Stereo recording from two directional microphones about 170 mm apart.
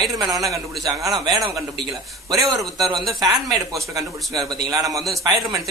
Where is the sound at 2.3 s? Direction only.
20° right (ahead or behind).